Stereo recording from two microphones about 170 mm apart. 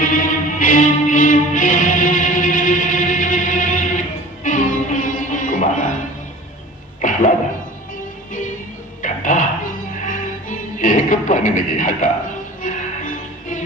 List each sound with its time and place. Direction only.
0.0 s music: 55° left (ahead or behind)
7.0 s a sound: 50° left (ahead or behind)
9.0 s music: 50° left (ahead or behind)